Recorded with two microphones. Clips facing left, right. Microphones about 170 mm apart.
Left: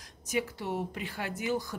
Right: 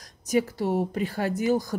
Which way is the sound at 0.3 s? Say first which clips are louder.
Right 8 dB; 40° right (ahead or behind).